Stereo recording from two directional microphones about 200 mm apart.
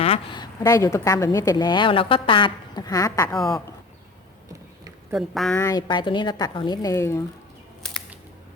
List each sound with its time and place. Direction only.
0.0 s a woman's voice: 25° left (ahead or behind)
5.1 s a woman's voice: centre (ahead or behind)
5.5 s a woman's voice: 15° left (ahead or behind)
7.8 s scissors: centre (ahead or behind)